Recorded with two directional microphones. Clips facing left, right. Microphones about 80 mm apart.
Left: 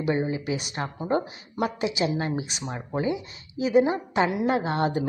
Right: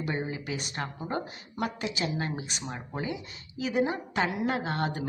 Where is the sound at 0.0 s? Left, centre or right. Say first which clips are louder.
Left 7 dB; centre.